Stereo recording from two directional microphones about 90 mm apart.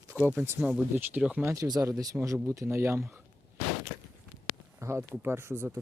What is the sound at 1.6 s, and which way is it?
Speech, 45° right (ahead or behind).